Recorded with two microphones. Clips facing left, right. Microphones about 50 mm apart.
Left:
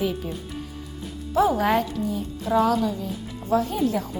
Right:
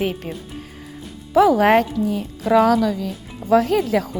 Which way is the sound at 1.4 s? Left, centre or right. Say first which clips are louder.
Right 6 dB; right.